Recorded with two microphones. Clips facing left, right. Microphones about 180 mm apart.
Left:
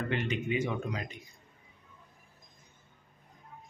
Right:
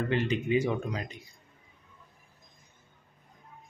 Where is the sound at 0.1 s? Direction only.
35° right (ahead or behind).